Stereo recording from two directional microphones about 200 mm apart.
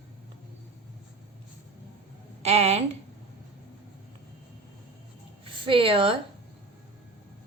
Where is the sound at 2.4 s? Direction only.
30° right (ahead or behind).